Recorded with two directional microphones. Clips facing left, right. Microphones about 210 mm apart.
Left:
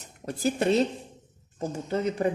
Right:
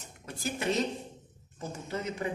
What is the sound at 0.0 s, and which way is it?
A woman's voice, 35° left (ahead or behind).